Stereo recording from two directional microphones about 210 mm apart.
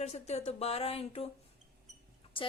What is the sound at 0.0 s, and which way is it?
A woman's voice, 30° left (ahead or behind).